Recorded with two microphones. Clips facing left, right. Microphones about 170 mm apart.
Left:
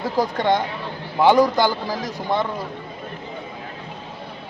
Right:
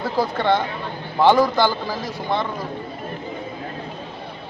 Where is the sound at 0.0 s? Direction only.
15° left (ahead or behind).